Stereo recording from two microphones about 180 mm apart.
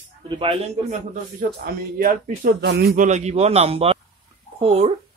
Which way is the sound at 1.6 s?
55° right (ahead or behind).